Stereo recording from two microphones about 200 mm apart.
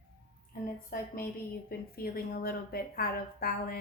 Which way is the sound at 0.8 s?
45° left (ahead or behind).